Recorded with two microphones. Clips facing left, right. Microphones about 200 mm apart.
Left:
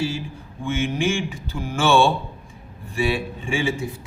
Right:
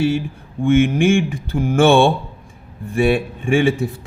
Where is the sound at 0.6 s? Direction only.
55° right (ahead or behind).